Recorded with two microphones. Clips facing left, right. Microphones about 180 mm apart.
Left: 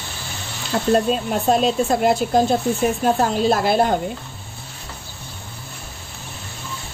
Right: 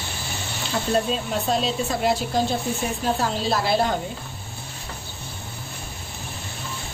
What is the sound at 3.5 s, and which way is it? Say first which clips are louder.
Speech: left 1 dB; 50° left (ahead or behind).